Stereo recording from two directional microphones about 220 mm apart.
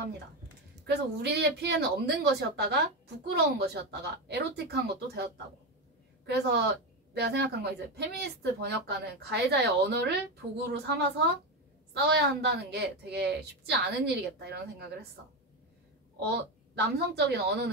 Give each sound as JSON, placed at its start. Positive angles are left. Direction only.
{"t": 0.8, "sound": "a woman's voice", "side_deg": -50}
{"t": 16.2, "sound": "a woman's voice", "side_deg": -50}